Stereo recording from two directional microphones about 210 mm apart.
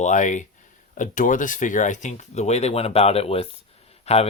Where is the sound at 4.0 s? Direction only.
30° left (ahead or behind).